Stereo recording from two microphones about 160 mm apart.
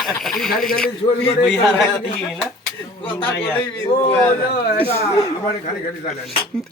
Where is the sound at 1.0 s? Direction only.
40° left (ahead or behind).